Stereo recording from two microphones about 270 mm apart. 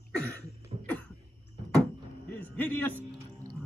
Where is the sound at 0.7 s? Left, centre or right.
Right.